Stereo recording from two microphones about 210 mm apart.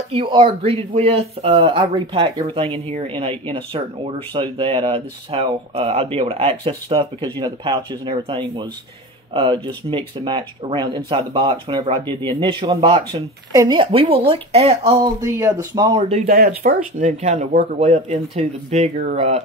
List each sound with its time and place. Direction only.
0.1 s speech: 25° right (ahead or behind)
15.1 s speech: 15° right (ahead or behind)
16.1 s speech: 30° right (ahead or behind)